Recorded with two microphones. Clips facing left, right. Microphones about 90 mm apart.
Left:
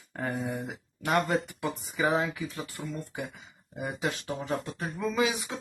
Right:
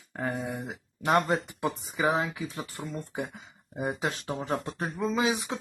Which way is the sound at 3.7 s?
35° right (ahead or behind).